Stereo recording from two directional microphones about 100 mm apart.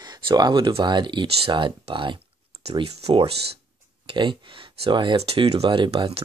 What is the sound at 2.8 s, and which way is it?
Speech, 75° right (ahead or behind).